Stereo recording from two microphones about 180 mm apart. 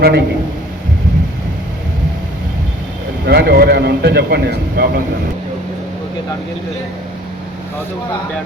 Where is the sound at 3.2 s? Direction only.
65° right (ahead or behind).